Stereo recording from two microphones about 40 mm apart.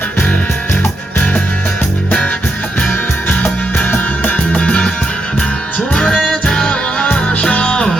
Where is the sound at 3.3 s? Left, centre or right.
Left.